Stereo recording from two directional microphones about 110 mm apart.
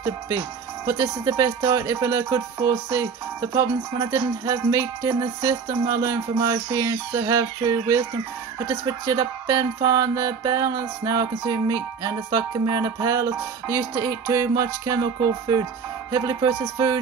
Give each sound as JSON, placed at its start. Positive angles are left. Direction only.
{"t": 0.8, "sound": "speech", "side_deg": -30}
{"t": 8.5, "sound": "music", "side_deg": -30}